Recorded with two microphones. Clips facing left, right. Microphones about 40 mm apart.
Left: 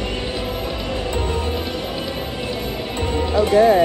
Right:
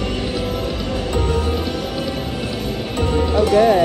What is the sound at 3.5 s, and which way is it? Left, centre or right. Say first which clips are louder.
Music: left 1 dB; left.